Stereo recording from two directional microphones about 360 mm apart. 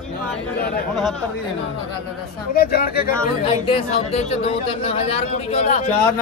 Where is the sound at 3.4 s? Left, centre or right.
Centre.